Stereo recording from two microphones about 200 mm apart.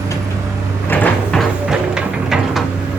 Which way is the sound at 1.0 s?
Centre (ahead or behind).